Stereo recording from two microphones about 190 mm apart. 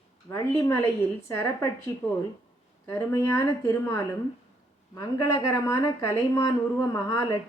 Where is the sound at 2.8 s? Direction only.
15° left (ahead or behind).